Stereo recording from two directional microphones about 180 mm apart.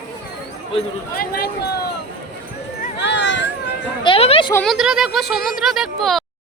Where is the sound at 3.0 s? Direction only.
75° left (ahead or behind).